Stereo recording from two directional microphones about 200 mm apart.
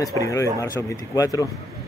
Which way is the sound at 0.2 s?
15° left (ahead or behind).